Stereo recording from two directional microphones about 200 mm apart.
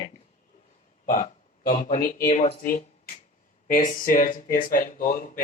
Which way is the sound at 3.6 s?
40° left (ahead or behind).